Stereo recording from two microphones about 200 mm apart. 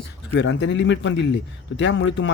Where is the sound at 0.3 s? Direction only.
65° left (ahead or behind).